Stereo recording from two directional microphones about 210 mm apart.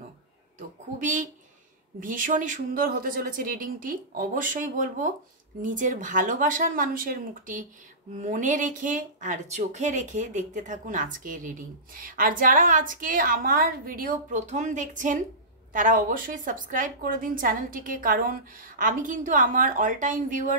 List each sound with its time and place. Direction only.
0.9 s a woman's voice: 35° right (ahead or behind)